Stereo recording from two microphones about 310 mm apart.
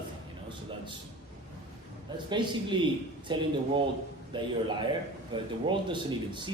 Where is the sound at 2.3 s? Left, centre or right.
Centre.